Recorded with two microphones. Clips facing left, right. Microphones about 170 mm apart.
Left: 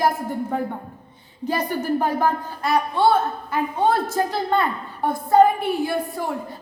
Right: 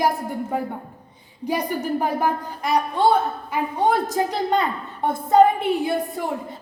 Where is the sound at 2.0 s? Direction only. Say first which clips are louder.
Left 1 dB; 15° right (ahead or behind).